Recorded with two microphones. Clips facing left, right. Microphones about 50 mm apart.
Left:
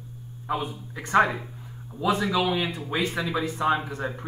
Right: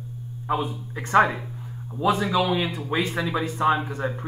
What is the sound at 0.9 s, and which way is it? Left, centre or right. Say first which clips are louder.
Speech: right 2 dB; right.